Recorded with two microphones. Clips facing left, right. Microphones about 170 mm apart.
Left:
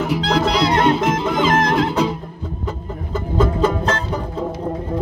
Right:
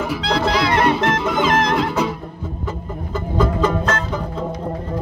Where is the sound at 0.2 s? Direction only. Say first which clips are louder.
Even; centre (ahead or behind).